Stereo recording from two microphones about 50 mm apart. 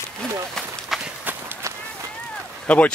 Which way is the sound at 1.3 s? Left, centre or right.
Right.